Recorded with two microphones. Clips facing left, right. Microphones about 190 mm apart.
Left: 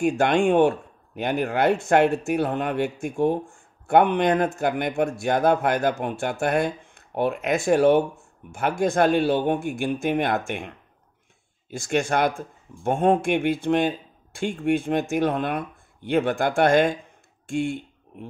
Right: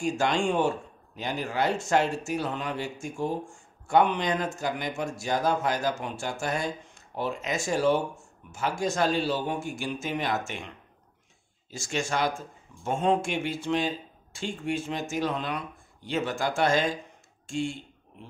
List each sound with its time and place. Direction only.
0.0 s speech: 60° left (ahead or behind)
11.7 s speech: 55° left (ahead or behind)